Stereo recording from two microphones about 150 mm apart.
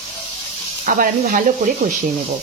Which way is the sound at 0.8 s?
65° right (ahead or behind).